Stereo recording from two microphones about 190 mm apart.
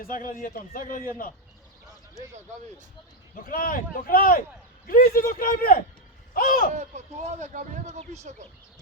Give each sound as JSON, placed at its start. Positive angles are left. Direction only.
{"t": 0.0, "sound": "a man's voice", "side_deg": 45}
{"t": 3.4, "sound": "a man's voice", "side_deg": 50}
{"t": 6.7, "sound": "speech", "side_deg": -35}